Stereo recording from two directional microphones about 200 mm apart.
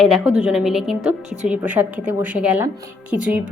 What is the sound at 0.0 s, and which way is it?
A woman's voice, centre (ahead or behind).